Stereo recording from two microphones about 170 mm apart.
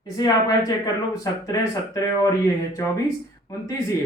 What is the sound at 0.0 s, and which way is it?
Speech, 25° left (ahead or behind).